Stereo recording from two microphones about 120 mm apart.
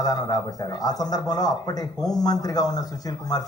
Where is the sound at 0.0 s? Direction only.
35° left (ahead or behind).